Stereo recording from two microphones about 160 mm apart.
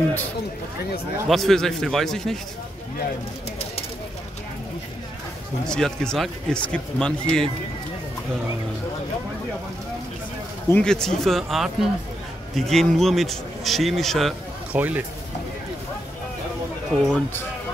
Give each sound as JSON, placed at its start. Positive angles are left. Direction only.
{"t": 1.3, "sound": "speech", "side_deg": 0}
{"t": 5.7, "sound": "speech", "side_deg": 5}
{"t": 10.7, "sound": "speech", "side_deg": 5}
{"t": 14.7, "sound": "speech", "side_deg": -10}
{"t": 16.9, "sound": "speech", "side_deg": 0}